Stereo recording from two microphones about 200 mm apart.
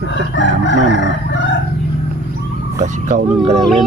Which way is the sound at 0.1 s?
65° left (ahead or behind).